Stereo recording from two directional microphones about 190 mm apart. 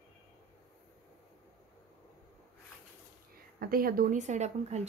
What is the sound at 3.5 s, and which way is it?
A woman's voice, 50° right (ahead or behind).